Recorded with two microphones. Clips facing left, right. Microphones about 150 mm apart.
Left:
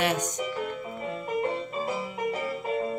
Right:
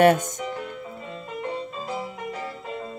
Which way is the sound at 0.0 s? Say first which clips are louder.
Right 10 dB; 50° right (ahead or behind).